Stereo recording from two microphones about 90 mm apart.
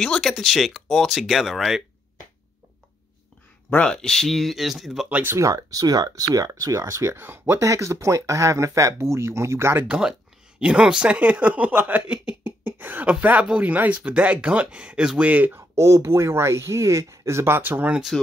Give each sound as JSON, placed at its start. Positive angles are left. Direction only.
{"t": 0.0, "sound": "speech", "side_deg": 5}
{"t": 3.7, "sound": "speech", "side_deg": 10}
{"t": 5.1, "sound": "speech", "side_deg": -30}
{"t": 9.8, "sound": "speech", "side_deg": -10}
{"t": 15.7, "sound": "speech", "side_deg": -35}